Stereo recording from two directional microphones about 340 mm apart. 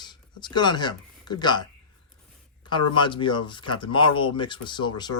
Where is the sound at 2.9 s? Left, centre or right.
Centre.